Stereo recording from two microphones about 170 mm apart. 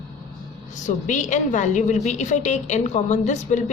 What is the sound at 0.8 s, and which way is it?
A woman's voice, 45° left (ahead or behind).